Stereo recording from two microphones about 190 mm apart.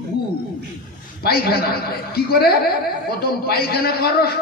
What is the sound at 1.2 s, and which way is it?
A woman's voice, 55° left (ahead or behind).